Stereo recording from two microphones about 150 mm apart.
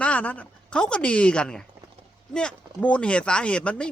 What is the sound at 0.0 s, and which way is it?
A woman's voice, 10° left (ahead or behind).